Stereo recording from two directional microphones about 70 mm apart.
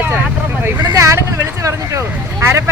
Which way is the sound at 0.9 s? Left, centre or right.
Right.